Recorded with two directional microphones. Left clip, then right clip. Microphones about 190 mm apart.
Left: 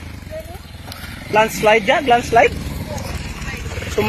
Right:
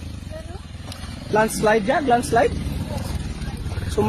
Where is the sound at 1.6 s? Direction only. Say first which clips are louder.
Left 5 dB; 30° right (ahead or behind).